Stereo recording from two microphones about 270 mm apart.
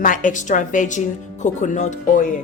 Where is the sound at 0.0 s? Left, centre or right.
Left.